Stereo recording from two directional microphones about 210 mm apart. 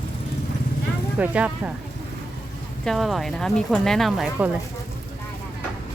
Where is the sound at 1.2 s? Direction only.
5° right (ahead or behind).